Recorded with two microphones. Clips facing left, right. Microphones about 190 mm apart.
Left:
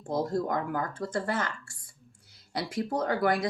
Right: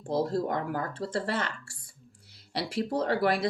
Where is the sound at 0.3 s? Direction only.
30° right (ahead or behind).